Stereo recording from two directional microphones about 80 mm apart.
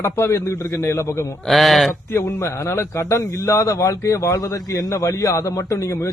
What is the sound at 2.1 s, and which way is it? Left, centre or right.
A man's voice, left.